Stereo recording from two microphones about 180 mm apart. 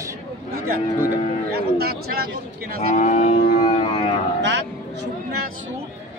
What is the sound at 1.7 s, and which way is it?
Speech, 60° right (ahead or behind).